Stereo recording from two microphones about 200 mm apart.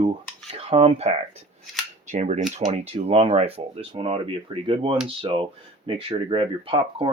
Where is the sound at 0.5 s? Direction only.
30° right (ahead or behind).